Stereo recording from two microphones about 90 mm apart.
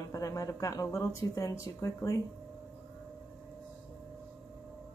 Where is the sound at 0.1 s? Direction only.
40° left (ahead or behind).